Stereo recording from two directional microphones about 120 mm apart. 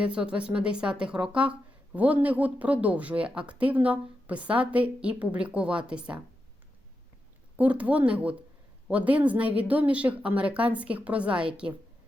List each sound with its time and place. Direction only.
0.0 s speech: 10° right (ahead or behind)
7.5 s speech: 10° right (ahead or behind)